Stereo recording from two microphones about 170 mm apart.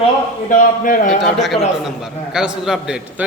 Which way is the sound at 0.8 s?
55° left (ahead or behind).